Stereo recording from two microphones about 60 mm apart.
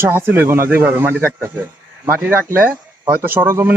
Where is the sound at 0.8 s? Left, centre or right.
Right.